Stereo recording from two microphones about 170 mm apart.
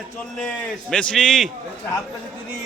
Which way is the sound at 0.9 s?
5° left (ahead or behind).